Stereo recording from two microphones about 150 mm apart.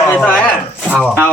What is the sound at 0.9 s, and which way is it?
Speech, 10° right (ahead or behind).